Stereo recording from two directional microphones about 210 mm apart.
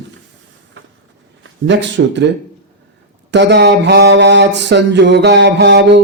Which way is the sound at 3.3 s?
55° right (ahead or behind).